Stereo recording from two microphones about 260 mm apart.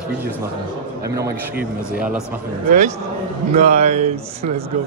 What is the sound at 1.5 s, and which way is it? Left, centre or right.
Speech, right.